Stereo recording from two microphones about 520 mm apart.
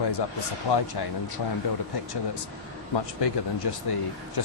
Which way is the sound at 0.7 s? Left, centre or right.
Left.